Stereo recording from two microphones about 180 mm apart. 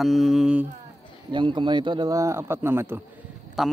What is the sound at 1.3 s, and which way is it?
A man's voice, 25° right (ahead or behind).